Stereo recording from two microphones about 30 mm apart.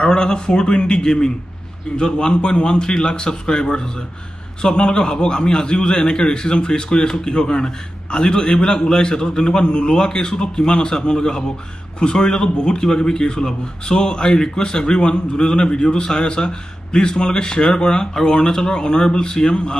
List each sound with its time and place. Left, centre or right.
0.0 s a man's voice: left